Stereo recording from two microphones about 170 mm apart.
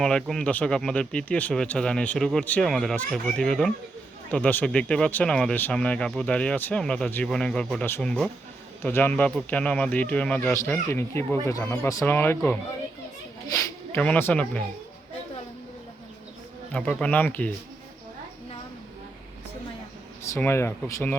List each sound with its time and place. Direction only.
0.0 s speech: 5° left (ahead or behind)
13.5 s a sound: 20° left (ahead or behind)
14.0 s speech: 10° left (ahead or behind)
16.7 s speech: 5° left (ahead or behind)
20.3 s speech: 15° left (ahead or behind)